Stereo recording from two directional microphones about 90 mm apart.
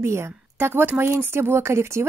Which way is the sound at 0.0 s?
30° right (ahead or behind).